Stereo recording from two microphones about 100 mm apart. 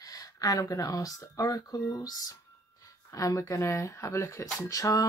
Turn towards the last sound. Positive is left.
turn(degrees=35)  # may be behind; listen again after turning